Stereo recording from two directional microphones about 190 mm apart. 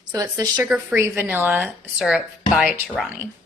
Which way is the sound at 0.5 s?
5° right (ahead or behind).